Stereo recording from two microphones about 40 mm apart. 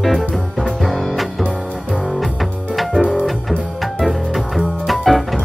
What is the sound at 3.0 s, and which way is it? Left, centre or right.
Music, right.